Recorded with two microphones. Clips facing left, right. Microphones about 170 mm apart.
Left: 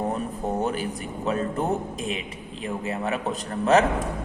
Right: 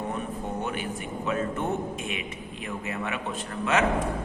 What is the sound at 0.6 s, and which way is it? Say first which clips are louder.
A man's voice: left 4 dB; 35° left (ahead or behind).